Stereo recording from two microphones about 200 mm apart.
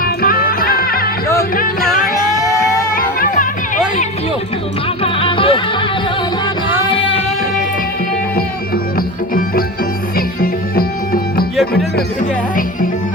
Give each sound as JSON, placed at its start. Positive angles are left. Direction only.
{"t": 0.0, "sound": "music", "side_deg": 45}
{"t": 2.9, "sound": "music", "side_deg": 45}
{"t": 5.0, "sound": "music", "side_deg": 25}
{"t": 8.4, "sound": "music", "side_deg": 50}